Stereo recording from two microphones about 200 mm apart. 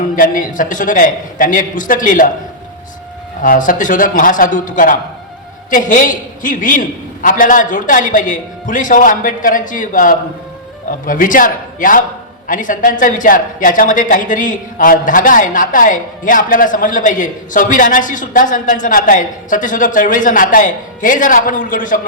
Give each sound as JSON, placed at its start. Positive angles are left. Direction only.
{"t": 0.2, "sound": "a woman's voice", "side_deg": 40}
{"t": 3.4, "sound": "a woman's voice", "side_deg": 45}